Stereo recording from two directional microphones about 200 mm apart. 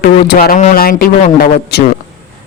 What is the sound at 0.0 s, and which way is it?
Speech, 50° left (ahead or behind).